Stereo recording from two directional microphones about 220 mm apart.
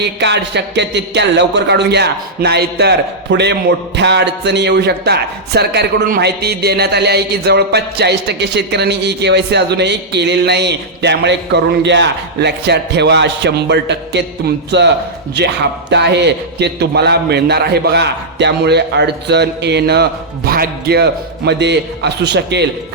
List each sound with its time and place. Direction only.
0.0 s a man's voice: 50° right (ahead or behind)